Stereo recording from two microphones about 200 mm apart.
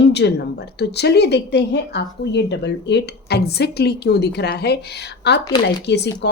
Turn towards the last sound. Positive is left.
turn(degrees=55)  # may be behind; listen again after turning